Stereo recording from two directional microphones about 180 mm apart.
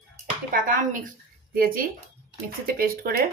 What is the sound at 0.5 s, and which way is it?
Speech, 50° right (ahead or behind).